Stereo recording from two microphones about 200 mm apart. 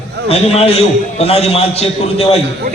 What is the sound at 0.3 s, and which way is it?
A man's voice, 30° left (ahead or behind).